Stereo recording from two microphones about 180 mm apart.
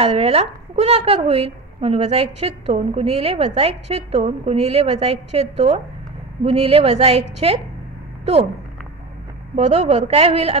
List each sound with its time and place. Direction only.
0.0 s a woman's voice: 35° right (ahead or behind)
9.6 s a woman's voice: 35° right (ahead or behind)